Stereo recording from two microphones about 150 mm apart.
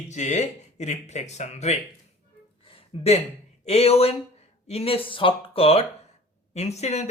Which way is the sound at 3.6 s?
45° left (ahead or behind).